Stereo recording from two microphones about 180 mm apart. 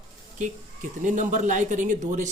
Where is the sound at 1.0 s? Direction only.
45° right (ahead or behind).